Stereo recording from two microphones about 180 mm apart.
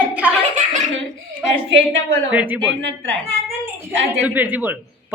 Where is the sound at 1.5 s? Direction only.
90° right.